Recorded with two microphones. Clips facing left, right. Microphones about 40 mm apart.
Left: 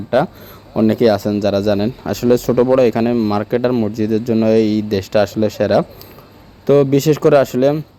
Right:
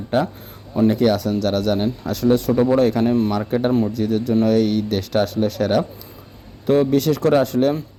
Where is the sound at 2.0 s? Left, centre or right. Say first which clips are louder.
Left 4 dB; left.